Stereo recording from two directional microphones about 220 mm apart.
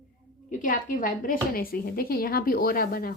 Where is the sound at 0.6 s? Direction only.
35° left (ahead or behind).